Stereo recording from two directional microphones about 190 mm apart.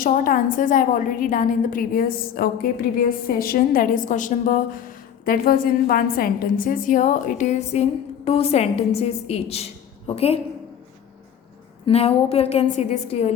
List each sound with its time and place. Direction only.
0.0 s a woman's voice: 45° left (ahead or behind)
11.9 s speech: 35° left (ahead or behind)